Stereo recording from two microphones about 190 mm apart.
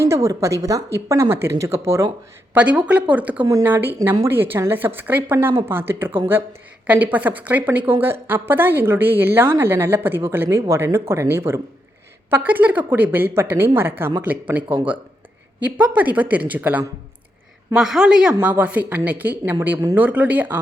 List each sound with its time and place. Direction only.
0.0 s speech: 15° right (ahead or behind)